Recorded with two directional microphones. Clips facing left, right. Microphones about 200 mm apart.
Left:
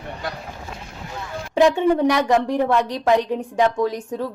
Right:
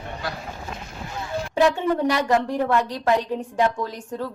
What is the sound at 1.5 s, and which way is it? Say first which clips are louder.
A woman's voice: left 4 dB; 15° left (ahead or behind).